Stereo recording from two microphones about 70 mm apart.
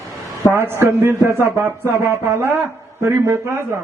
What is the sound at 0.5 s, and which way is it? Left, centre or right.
A man's voice, right.